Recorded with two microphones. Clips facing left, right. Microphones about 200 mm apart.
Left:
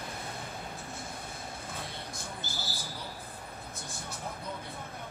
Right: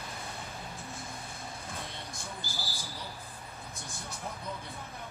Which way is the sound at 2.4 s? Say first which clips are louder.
Left 1 dB; 20° left (ahead or behind).